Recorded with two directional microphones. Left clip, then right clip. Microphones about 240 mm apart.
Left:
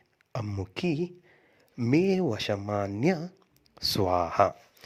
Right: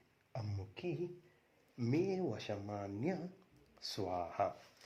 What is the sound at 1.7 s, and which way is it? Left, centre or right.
Speech, left.